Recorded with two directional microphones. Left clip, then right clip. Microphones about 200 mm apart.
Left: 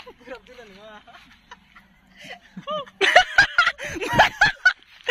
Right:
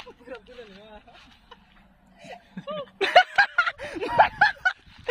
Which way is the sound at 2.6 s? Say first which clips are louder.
Left 5 dB; 25° left (ahead or behind).